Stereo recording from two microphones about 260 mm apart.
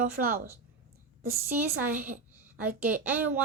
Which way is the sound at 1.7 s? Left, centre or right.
Right.